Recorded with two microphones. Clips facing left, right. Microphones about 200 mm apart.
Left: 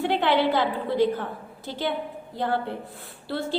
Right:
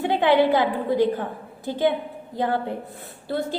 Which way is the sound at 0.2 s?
15° right (ahead or behind).